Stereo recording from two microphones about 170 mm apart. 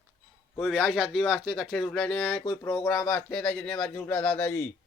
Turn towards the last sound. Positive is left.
turn(degrees=10)  # may be behind; listen again after turning